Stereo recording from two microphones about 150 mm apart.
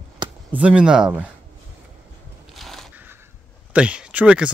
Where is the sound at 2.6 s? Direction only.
Centre (ahead or behind).